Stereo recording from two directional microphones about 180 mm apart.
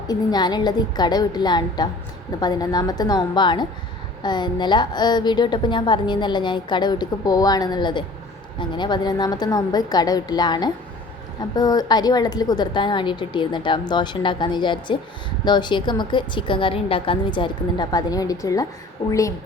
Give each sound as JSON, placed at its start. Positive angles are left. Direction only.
{"t": 0.1, "sound": "a woman's voice", "side_deg": 25}